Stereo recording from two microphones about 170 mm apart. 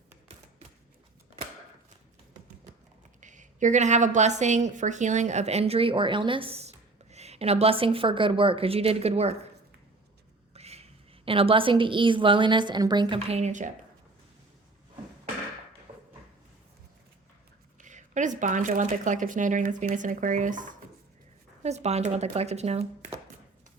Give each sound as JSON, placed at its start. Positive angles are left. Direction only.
{"t": 3.2, "sound": "a woman's voice", "side_deg": -45}
{"t": 10.5, "sound": "a sound", "side_deg": -35}
{"t": 11.3, "sound": "a woman's voice", "side_deg": -30}
{"t": 13.1, "sound": "a woman's voice", "side_deg": -40}
{"t": 17.7, "sound": "a woman's voice", "side_deg": -45}